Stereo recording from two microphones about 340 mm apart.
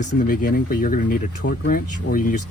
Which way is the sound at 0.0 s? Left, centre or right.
Left.